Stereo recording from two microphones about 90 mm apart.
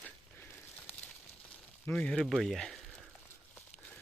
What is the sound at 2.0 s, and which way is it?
Speech, 15° left (ahead or behind).